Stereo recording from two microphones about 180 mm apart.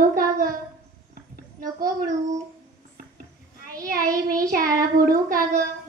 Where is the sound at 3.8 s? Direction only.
50° right (ahead or behind).